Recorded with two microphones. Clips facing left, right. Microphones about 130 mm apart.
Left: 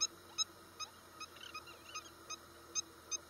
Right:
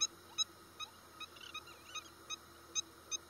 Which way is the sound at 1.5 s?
25° left (ahead or behind).